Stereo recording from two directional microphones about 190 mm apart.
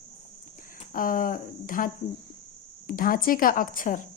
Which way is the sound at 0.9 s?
45° left (ahead or behind).